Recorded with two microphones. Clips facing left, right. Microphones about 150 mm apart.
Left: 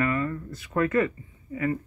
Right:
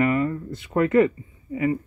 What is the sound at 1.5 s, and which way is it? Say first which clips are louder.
Speech: right 4 dB; 15° right (ahead or behind).